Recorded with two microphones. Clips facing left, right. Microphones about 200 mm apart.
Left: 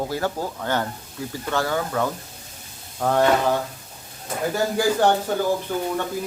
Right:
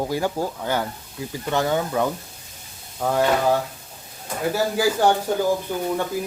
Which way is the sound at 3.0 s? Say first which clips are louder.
Left 1 dB; 5° right (ahead or behind).